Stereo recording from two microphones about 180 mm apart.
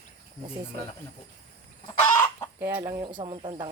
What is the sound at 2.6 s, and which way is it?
Speech, 15° right (ahead or behind).